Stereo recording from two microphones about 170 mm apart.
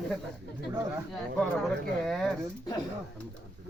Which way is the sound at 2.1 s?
Centre (ahead or behind).